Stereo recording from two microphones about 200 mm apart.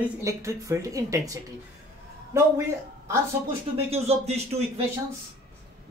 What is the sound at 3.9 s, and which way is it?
Speech, 30° right (ahead or behind).